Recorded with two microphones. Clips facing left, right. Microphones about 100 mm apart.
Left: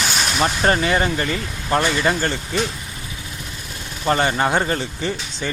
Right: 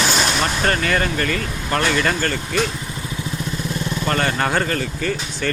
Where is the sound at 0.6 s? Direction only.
20° left (ahead or behind).